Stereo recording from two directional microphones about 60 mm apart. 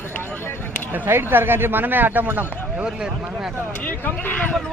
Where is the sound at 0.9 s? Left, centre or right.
Right.